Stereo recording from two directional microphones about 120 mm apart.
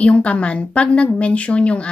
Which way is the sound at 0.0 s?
10° left (ahead or behind).